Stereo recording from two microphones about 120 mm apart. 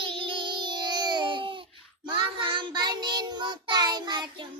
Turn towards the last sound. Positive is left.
turn(degrees=-35)  # may be behind; listen again after turning